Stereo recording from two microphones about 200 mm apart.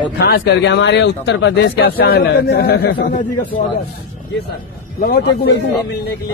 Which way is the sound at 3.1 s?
40° left (ahead or behind).